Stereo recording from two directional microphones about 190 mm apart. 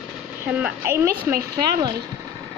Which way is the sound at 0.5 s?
10° right (ahead or behind).